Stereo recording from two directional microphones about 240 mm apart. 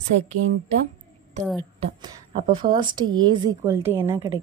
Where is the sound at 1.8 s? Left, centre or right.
Centre.